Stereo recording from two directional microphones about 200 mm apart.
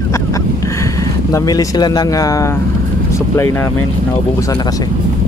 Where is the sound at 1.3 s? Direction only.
20° left (ahead or behind).